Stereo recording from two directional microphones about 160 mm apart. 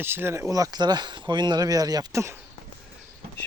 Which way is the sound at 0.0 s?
15° right (ahead or behind).